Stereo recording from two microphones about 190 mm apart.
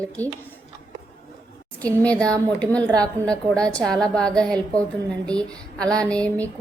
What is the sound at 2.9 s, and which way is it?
Speech, 20° right (ahead or behind).